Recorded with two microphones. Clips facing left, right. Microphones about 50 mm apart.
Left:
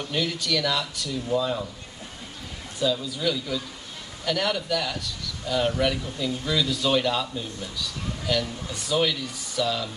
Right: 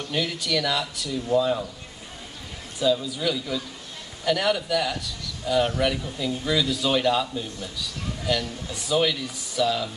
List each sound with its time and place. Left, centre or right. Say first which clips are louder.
0.0 s a man's voice: even; centre
2.8 s a man's voice: right 2 dB; centre